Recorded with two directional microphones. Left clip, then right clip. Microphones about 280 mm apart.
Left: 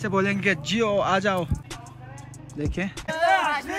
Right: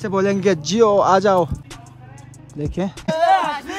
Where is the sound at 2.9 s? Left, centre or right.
Right.